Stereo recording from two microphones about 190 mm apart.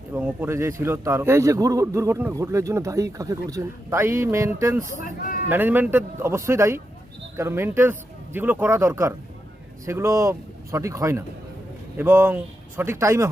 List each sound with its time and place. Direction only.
0.1 s a man's voice: 10° right (ahead or behind)